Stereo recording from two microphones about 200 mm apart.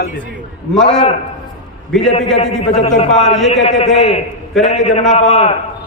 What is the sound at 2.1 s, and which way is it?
A man's voice, 35° left (ahead or behind).